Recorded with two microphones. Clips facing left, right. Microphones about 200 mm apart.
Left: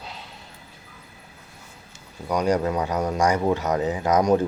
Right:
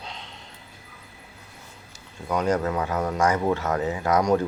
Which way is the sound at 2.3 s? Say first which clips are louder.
Left 2 dB; 15° left (ahead or behind).